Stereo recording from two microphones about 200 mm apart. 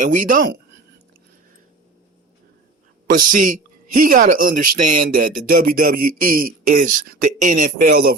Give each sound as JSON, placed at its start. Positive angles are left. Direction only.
{"t": 0.0, "sound": "speech", "side_deg": -40}
{"t": 3.1, "sound": "speech", "side_deg": -45}